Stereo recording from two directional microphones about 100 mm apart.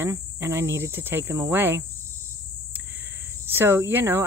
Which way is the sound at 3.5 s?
25° right (ahead or behind).